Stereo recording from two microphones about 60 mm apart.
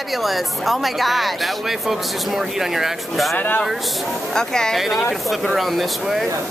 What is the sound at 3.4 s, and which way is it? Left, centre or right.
Speech, left.